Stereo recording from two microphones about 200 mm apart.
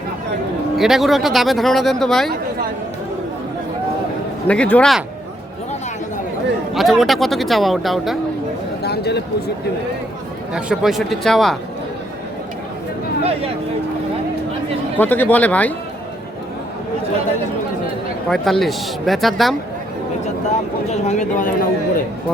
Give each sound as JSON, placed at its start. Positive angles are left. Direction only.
{"t": 0.8, "sound": "speech", "side_deg": 0}
{"t": 4.4, "sound": "speech", "side_deg": 5}
{"t": 6.7, "sound": "speech", "side_deg": 0}
{"t": 8.8, "sound": "speech", "side_deg": 55}
{"t": 10.5, "sound": "speech", "side_deg": -5}
{"t": 14.9, "sound": "speech", "side_deg": 10}
{"t": 18.3, "sound": "speech", "side_deg": 0}
{"t": 20.9, "sound": "speech", "side_deg": 35}